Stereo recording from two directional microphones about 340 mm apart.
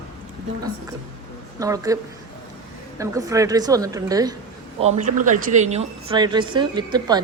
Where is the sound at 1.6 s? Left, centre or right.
Centre.